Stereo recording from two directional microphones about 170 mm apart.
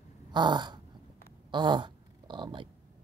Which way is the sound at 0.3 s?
25° right (ahead or behind).